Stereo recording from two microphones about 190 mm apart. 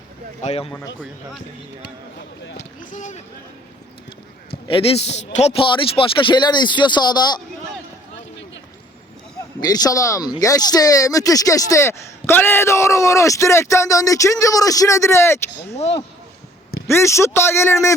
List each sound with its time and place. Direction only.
0.4 s speech: 30° left (ahead or behind)
0.9 s speech: centre (ahead or behind)
2.9 s speech: 40° left (ahead or behind)
4.7 s a man's voice: 30° left (ahead or behind)
9.6 s speech: 20° left (ahead or behind)
16.9 s speech: 15° left (ahead or behind)